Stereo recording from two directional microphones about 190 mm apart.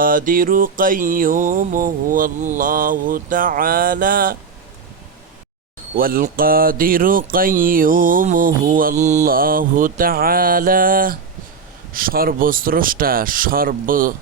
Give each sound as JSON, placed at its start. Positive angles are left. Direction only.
{"t": 0.0, "sound": "speech", "side_deg": -45}
{"t": 6.0, "sound": "speech", "side_deg": -50}